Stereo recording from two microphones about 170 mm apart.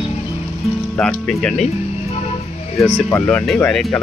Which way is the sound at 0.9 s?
5° left (ahead or behind).